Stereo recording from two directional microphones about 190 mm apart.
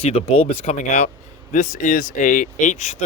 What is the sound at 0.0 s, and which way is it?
Speech, 30° left (ahead or behind).